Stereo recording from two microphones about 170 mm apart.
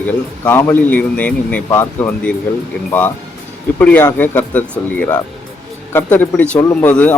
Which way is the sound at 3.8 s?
10° left (ahead or behind).